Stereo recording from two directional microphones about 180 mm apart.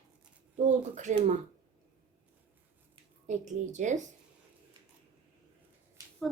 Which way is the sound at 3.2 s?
40° right (ahead or behind).